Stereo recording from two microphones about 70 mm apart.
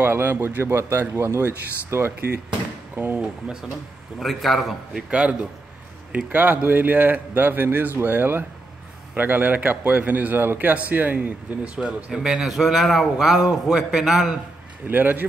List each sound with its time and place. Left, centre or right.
0.0 s speech: right
4.2 s a man's voice: centre
5.1 s a man's voice: centre
14.9 s a man's voice: right